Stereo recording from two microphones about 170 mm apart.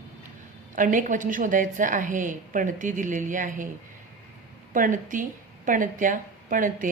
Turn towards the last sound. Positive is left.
turn(degrees=-50)  # may be behind; listen again after turning